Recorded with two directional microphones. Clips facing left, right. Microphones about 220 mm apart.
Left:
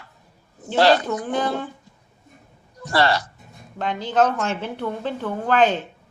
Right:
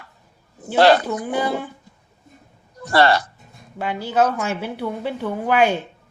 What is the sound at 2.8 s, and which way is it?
Speech, 55° right (ahead or behind).